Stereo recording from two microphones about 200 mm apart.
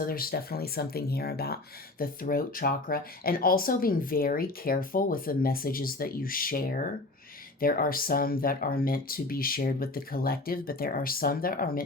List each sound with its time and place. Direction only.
0.0 s speech: 45° left (ahead or behind)